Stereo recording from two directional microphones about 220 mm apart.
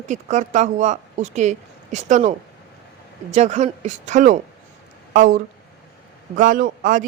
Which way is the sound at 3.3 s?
30° right (ahead or behind).